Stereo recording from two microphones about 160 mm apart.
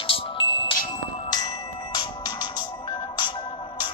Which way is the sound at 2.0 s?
25° left (ahead or behind).